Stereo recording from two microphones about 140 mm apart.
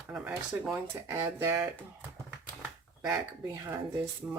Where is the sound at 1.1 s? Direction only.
20° right (ahead or behind).